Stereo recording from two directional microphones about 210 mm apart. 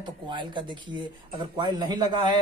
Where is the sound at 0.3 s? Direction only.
20° right (ahead or behind).